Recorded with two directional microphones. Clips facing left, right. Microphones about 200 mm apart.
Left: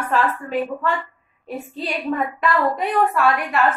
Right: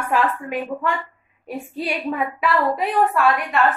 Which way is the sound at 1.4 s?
10° right (ahead or behind).